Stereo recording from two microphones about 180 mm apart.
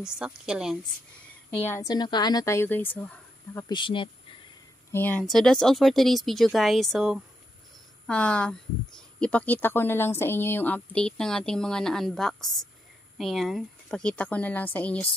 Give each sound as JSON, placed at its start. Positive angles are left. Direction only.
{"t": 0.0, "sound": "speech", "side_deg": -5}
{"t": 1.5, "sound": "a woman's voice", "side_deg": 10}
{"t": 3.6, "sound": "speech", "side_deg": 25}
{"t": 4.9, "sound": "a woman's voice", "side_deg": 10}